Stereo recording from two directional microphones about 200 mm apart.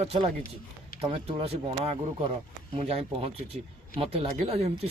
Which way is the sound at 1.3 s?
30° right (ahead or behind).